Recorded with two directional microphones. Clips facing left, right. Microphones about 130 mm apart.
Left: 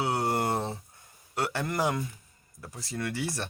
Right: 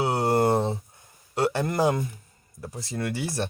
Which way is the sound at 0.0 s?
30° right (ahead or behind).